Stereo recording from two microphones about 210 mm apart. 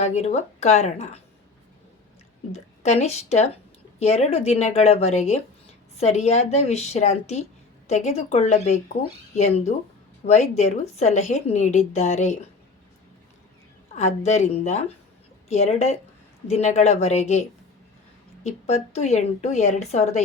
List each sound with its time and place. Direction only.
0.0 s a woman's voice: 30° left (ahead or behind)
2.5 s a woman's voice: 30° left (ahead or behind)
13.9 s a woman's voice: 30° left (ahead or behind)
18.4 s a woman's voice: 30° left (ahead or behind)